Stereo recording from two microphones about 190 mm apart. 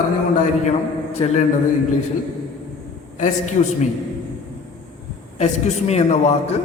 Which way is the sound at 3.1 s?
40° left (ahead or behind).